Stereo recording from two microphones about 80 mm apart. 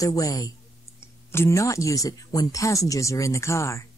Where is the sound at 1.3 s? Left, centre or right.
Left.